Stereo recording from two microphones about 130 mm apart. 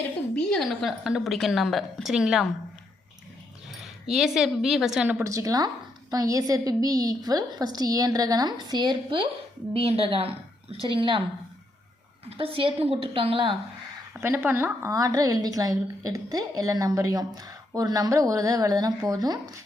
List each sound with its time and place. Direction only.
0.5 s a woman's voice: centre (ahead or behind)
3.7 s speech: 5° right (ahead or behind)
5.1 s a woman's voice: 25° right (ahead or behind)
9.7 s a woman's voice: 50° right (ahead or behind)
12.2 s a woman's voice: 45° right (ahead or behind)
14.2 s a woman's voice: 20° right (ahead or behind)